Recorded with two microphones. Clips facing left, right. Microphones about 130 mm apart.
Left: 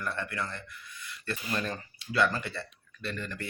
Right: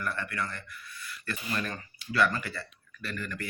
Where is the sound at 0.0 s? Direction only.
25° left (ahead or behind).